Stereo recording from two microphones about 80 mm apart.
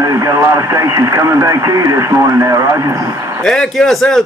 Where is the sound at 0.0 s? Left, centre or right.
Right.